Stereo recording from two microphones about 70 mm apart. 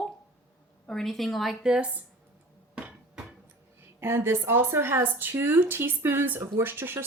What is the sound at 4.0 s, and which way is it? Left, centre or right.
Speech, right.